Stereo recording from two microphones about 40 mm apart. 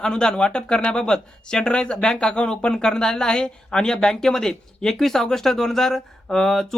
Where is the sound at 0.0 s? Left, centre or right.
Left.